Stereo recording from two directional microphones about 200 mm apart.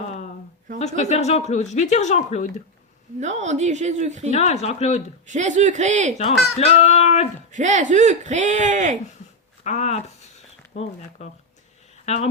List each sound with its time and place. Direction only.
0.8 s speech: 35° left (ahead or behind)
3.2 s speech: 35° right (ahead or behind)
4.3 s speech: 35° left (ahead or behind)
5.2 s speech: 35° right (ahead or behind)
6.6 s speech: 35° left (ahead or behind)
7.5 s speech: 35° right (ahead or behind)
9.6 s speech: 35° left (ahead or behind)